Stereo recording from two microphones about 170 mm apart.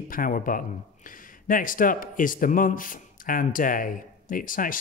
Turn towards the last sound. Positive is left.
turn(degrees=55)  # may be behind; listen again after turning